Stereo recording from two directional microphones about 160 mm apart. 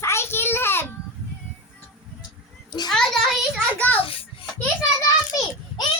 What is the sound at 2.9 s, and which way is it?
A child's voice, centre (ahead or behind).